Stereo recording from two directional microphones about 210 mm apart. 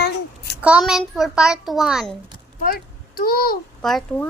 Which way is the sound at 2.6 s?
45° left (ahead or behind).